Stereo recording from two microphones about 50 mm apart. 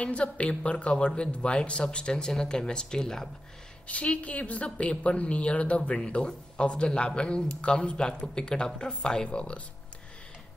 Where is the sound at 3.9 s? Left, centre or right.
Left.